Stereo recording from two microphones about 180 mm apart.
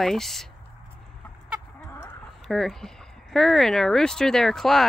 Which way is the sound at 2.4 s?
Centre (ahead or behind).